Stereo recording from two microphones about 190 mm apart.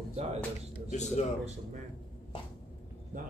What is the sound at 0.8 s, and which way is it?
Speech, 35° left (ahead or behind).